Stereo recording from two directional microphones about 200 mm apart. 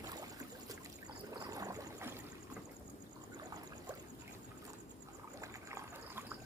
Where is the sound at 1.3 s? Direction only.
20° right (ahead or behind).